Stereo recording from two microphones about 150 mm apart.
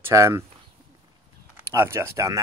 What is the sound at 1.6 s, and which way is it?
Speech, 15° right (ahead or behind).